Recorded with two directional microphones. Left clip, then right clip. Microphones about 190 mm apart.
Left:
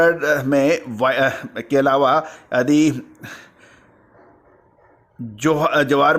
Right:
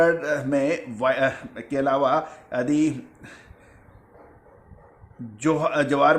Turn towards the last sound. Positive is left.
turn(degrees=40)  # may be behind; listen again after turning